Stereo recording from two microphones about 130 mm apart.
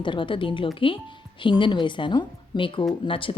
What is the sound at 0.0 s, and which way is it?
Speech, 40° left (ahead or behind).